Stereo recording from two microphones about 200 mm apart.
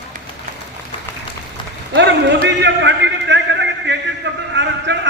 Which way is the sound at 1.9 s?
65° right (ahead or behind).